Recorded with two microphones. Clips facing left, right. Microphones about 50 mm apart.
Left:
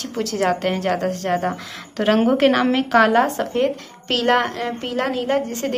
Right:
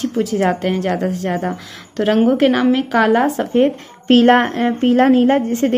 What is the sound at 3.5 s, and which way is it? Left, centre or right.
A woman's voice, right.